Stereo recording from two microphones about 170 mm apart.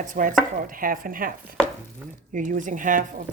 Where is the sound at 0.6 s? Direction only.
55° right (ahead or behind).